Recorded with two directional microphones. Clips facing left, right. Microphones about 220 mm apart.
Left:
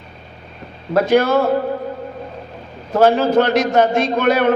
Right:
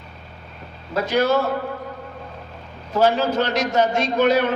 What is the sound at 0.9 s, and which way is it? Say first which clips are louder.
Speech: left 5 dB; 55° left (ahead or behind).